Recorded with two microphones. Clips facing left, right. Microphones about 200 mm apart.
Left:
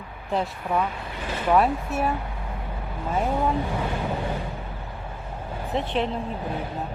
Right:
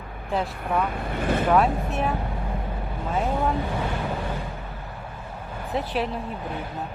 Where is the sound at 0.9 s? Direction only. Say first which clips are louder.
Right 6 dB; 55° right (ahead or behind).